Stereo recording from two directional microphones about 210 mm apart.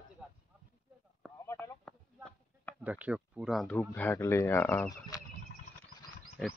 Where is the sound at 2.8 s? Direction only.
5° right (ahead or behind); by 5.2 s 15° left (ahead or behind).